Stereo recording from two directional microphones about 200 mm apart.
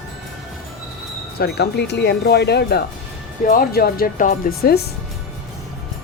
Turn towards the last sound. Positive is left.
turn(degrees=50)  # may be behind; listen again after turning